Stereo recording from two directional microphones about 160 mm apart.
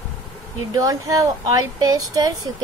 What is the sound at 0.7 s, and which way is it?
Speech, 20° right (ahead or behind).